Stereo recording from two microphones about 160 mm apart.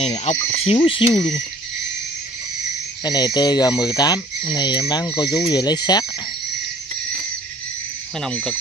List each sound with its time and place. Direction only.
0.0 s cricket: 40° left (ahead or behind)
3.0 s speech: 25° left (ahead or behind)